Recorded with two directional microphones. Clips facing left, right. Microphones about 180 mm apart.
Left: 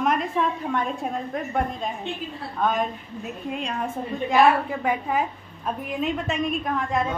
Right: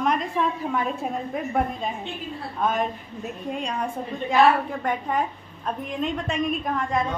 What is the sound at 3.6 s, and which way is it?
A woman's voice, centre (ahead or behind).